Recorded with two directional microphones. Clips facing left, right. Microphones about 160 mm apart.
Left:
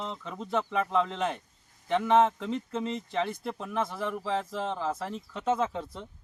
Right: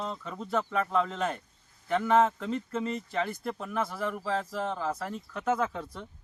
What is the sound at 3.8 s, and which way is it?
A man's voice, centre (ahead or behind).